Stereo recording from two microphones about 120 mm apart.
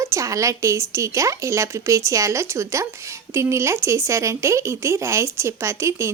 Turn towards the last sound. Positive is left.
turn(degrees=-25)  # may be behind; listen again after turning